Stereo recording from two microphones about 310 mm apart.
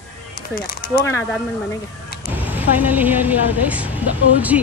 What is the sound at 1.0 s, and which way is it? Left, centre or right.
Speech, centre.